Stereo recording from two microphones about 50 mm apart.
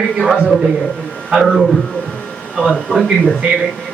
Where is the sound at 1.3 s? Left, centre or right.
Centre.